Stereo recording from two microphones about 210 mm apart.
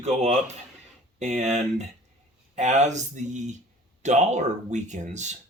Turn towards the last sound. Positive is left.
turn(degrees=-35)  # may be behind; listen again after turning